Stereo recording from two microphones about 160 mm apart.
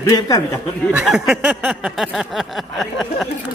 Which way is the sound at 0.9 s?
Centre (ahead or behind).